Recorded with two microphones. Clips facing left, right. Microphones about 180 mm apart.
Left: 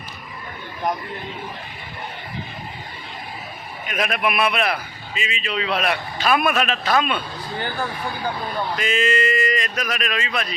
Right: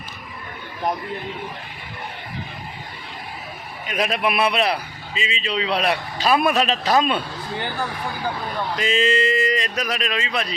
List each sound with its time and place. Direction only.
3.8 s a man's voice: 30° right (ahead or behind)
8.8 s a man's voice: 30° right (ahead or behind)